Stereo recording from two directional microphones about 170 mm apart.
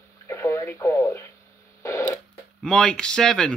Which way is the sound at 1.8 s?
20° left (ahead or behind).